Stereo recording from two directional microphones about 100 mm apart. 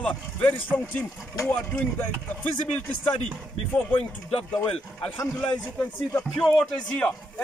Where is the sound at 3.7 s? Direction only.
20° left (ahead or behind).